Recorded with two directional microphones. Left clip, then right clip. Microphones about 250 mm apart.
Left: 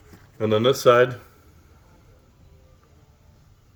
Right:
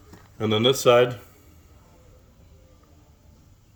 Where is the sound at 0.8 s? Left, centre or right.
Centre.